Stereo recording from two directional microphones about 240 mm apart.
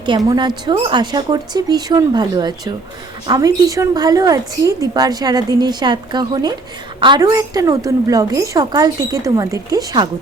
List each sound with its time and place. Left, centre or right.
0.3 s a woman's voice: centre